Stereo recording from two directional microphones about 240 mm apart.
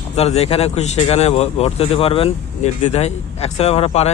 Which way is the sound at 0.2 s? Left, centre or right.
Left.